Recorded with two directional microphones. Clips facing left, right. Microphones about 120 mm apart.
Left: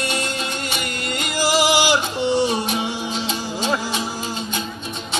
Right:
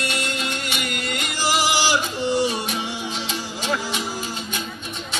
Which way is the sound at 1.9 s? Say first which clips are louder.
Left 3 dB; 25° left (ahead or behind).